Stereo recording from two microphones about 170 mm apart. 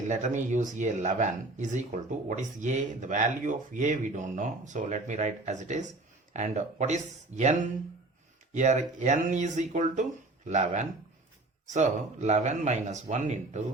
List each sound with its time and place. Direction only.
0.0 s speech: 45° right (ahead or behind)